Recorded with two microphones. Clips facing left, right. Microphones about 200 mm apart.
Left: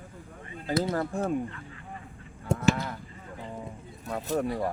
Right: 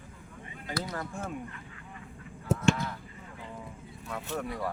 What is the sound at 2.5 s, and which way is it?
Honk, 5° right (ahead or behind).